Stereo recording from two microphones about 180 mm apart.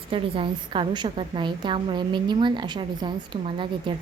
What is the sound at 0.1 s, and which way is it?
A woman's voice, 30° right (ahead or behind).